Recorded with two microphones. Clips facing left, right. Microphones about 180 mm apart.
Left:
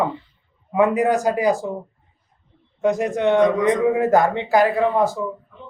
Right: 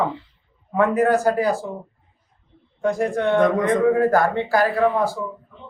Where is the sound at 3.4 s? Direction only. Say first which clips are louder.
Left 1 dB; 50° right (ahead or behind).